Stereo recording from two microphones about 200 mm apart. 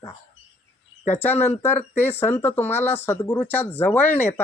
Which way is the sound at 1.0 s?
10° left (ahead or behind).